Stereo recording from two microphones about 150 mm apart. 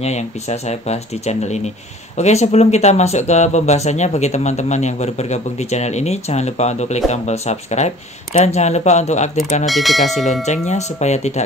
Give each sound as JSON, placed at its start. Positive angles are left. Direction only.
{"t": 0.0, "sound": "speech", "side_deg": 50}
{"t": 9.7, "sound": "speech", "side_deg": 0}
{"t": 10.0, "sound": "speech", "side_deg": 50}